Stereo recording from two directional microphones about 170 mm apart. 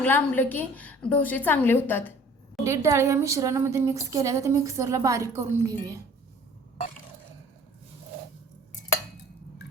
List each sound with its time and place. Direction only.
0.0 s a woman's voice: 10° left (ahead or behind)
2.6 s a woman's voice: 15° right (ahead or behind)